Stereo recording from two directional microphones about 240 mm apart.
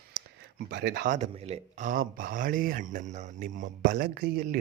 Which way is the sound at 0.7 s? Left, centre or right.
Right.